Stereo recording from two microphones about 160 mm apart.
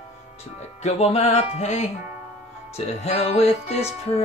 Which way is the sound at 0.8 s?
40° left (ahead or behind).